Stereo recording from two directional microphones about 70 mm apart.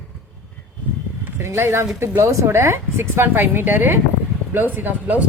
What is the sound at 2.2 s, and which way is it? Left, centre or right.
Speech, right.